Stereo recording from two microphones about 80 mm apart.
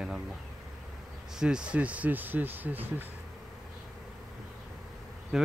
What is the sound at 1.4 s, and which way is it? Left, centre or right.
Speech, centre.